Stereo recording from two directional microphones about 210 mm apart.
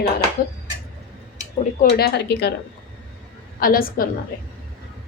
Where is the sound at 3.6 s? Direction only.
45° left (ahead or behind).